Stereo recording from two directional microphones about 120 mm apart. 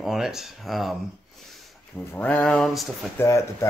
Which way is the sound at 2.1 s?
15° left (ahead or behind).